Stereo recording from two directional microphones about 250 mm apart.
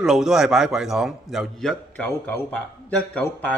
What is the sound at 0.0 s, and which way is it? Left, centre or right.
A man's voice, centre.